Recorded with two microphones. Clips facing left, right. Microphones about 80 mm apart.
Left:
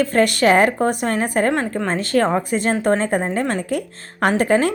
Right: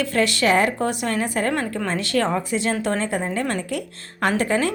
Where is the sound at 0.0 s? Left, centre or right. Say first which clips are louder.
Left 5 dB; left.